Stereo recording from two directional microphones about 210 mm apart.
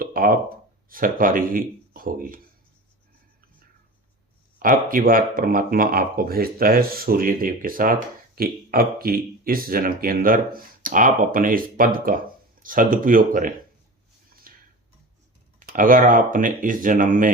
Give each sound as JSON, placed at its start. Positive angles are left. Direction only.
{"t": 0.0, "sound": "a sound", "side_deg": -45}
{"t": 0.9, "sound": "speech", "side_deg": -40}
{"t": 4.6, "sound": "speech", "side_deg": -40}
{"t": 14.5, "sound": "tick-tock", "side_deg": -40}
{"t": 15.5, "sound": "speech", "side_deg": -40}